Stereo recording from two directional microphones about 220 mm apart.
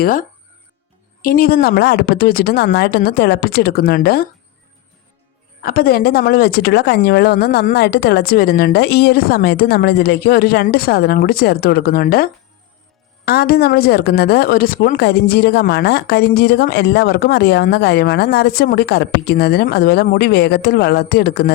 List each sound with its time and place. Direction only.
0.0 s a woman's voice: 40° left (ahead or behind)
5.6 s a woman's voice: 40° left (ahead or behind)